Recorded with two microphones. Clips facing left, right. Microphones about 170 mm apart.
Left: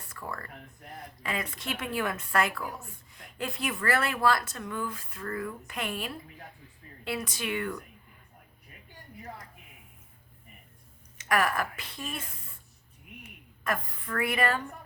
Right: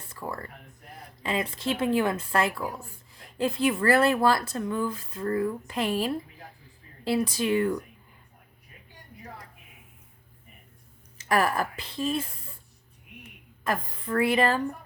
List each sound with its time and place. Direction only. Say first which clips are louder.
0.1 s a sound: right 4 dB; 25° right (ahead or behind)
1.2 s speech: right 6 dB; 25° right (ahead or behind)
11.2 s speech: right 3 dB; 30° right (ahead or behind)
13.7 s speech: right 4 dB; 30° right (ahead or behind)